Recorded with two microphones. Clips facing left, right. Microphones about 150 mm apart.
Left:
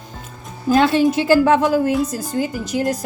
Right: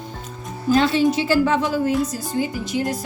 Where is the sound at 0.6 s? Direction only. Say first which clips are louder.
Left 2 dB; 50° left (ahead or behind).